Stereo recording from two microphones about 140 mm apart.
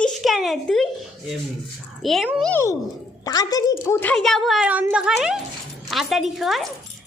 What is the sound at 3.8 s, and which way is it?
Speech, 15° left (ahead or behind).